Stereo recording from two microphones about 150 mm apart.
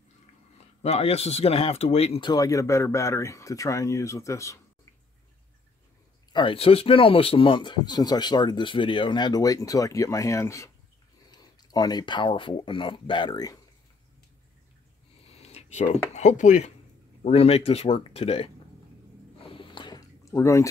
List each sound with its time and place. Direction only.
0.8 s speech: 45° left (ahead or behind); by 4.6 s 20° left (ahead or behind)
6.3 s speech: 35° left (ahead or behind)
15.3 s speech: 45° left (ahead or behind)
17.2 s speech: 40° left (ahead or behind)
19.4 s a sound: 35° left (ahead or behind)